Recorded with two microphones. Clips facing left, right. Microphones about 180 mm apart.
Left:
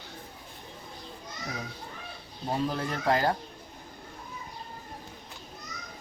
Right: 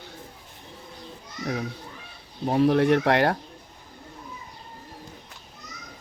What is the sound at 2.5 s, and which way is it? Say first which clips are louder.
Speech: right 11 dB; 70° right (ahead or behind).